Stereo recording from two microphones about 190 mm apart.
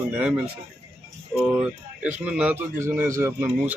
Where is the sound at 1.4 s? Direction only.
5° right (ahead or behind).